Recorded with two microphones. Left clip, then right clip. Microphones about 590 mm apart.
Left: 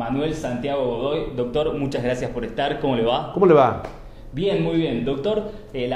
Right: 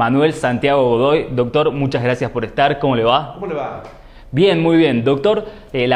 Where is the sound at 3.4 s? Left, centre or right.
Left.